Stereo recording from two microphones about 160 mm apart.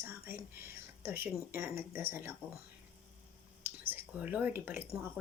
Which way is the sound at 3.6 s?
10° right (ahead or behind).